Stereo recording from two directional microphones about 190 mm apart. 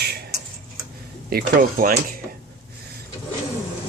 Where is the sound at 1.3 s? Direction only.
50° right (ahead or behind).